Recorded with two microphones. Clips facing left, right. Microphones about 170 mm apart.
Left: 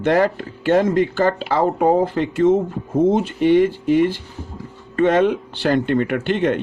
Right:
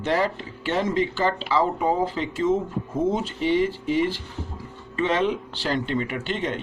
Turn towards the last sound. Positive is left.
turn(degrees=55)  # may be behind; listen again after turning